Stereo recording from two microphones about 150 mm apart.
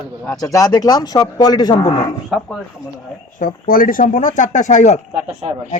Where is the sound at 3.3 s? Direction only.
70° left (ahead or behind).